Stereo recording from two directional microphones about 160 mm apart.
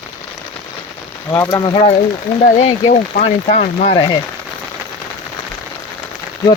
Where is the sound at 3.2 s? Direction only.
55° left (ahead or behind).